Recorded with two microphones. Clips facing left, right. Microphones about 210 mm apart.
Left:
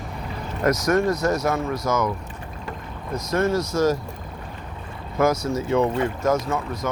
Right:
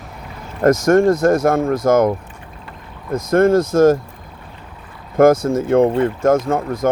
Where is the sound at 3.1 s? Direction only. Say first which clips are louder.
Right 9 dB; 50° right (ahead or behind).